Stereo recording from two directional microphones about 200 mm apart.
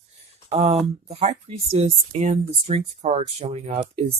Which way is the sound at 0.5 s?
30° right (ahead or behind).